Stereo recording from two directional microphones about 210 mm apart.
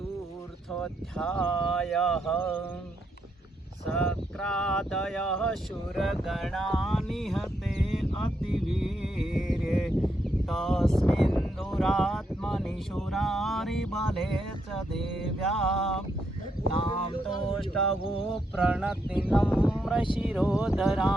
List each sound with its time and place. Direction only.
0.7 s speech: centre (ahead or behind)
3.8 s speech: 5° left (ahead or behind)
8.2 s a sound: centre (ahead or behind)
10.5 s speech: centre (ahead or behind)
15.4 s speech: centre (ahead or behind)
16.7 s a sound: 25° left (ahead or behind)
18.5 s speech: 5° right (ahead or behind)